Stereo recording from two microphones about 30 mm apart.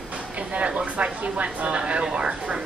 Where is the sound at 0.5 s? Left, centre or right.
Right.